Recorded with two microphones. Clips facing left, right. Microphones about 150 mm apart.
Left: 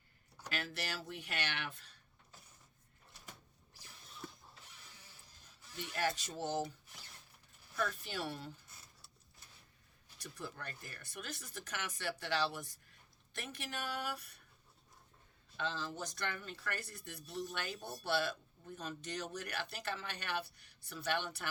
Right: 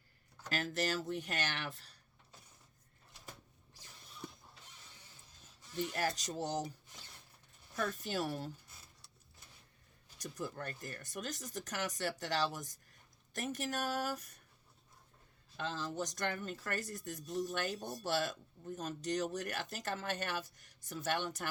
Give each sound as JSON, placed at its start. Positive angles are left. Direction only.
{"t": 0.5, "sound": "speech", "side_deg": -45}
{"t": 5.7, "sound": "speech", "side_deg": -35}
{"t": 7.8, "sound": "speech", "side_deg": -40}
{"t": 10.2, "sound": "speech", "side_deg": -40}
{"t": 15.5, "sound": "speech", "side_deg": -40}